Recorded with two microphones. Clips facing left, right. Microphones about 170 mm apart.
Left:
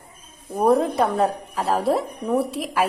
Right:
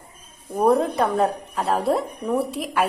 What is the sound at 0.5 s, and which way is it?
Speech, centre (ahead or behind).